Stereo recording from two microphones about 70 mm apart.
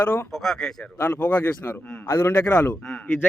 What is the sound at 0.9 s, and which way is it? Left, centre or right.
Speech, left.